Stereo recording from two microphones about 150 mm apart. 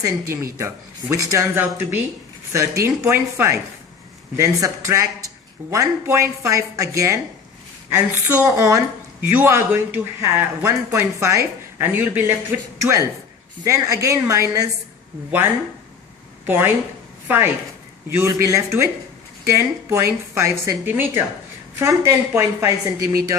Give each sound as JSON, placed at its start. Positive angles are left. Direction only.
{"t": 0.0, "sound": "speech", "side_deg": -20}
{"t": 16.5, "sound": "speech", "side_deg": -15}